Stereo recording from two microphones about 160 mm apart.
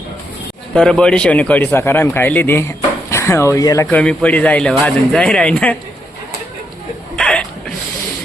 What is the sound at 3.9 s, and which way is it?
Speech, 10° left (ahead or behind).